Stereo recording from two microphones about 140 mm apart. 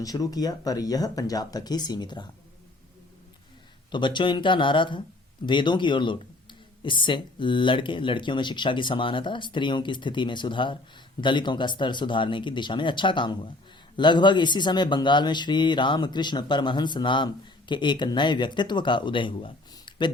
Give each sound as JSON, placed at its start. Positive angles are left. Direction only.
{"t": 0.0, "sound": "speech", "side_deg": 25}
{"t": 3.9, "sound": "speech", "side_deg": 35}